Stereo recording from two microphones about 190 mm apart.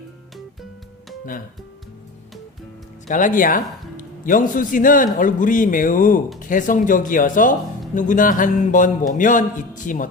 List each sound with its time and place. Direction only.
3.1 s speech: 40° left (ahead or behind)